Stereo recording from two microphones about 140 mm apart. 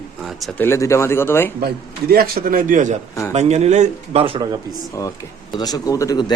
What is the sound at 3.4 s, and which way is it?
Speech, 55° right (ahead or behind).